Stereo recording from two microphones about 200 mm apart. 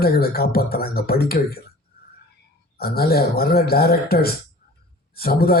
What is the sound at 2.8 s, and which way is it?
Speech, 50° left (ahead or behind).